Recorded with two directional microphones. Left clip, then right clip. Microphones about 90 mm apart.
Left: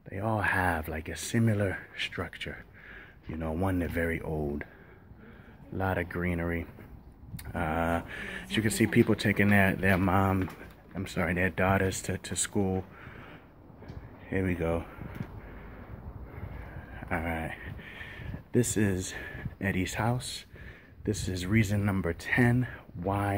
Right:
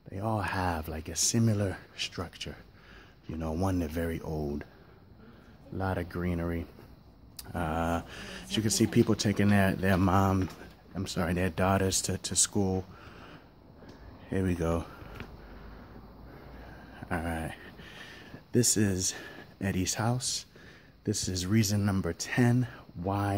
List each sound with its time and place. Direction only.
0.1 s speech: 25° right (ahead or behind)
3.3 s speech: 40° right (ahead or behind)
5.8 s speech: 30° right (ahead or behind)
11.2 s speech: 80° right; by 12.8 s 55° right (ahead or behind)
14.3 s speech: 85° right
16.9 s a sound: 60° right (ahead or behind)
21.3 s speech: 55° right (ahead or behind)
22.0 s speech: 45° right (ahead or behind)